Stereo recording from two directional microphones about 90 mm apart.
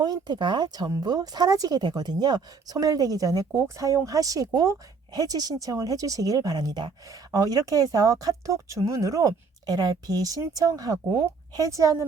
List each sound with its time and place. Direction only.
0.0 s a woman's voice: 50° right (ahead or behind); by 12.0 s 35° right (ahead or behind)